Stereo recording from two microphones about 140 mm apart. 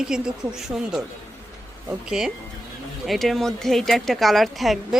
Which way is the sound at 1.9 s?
5° right (ahead or behind).